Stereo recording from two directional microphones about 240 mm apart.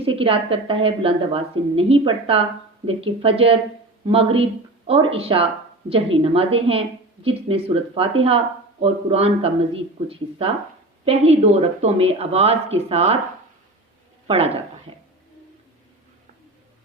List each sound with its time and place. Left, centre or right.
0.0 s a woman's voice: right
14.3 s a woman's voice: right